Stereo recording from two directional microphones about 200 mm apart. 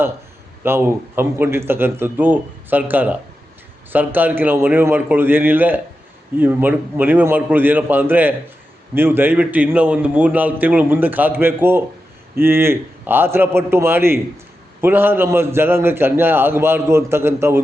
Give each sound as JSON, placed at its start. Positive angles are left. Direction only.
{"t": 0.6, "sound": "a man's voice", "side_deg": -10}